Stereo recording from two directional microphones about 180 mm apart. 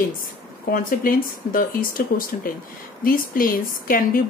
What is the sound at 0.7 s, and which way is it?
Speech, 50° left (ahead or behind).